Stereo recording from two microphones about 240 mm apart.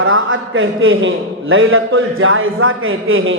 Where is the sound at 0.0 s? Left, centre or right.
Right.